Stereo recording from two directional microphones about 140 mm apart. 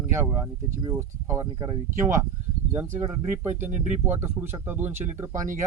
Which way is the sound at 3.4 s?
15° right (ahead or behind).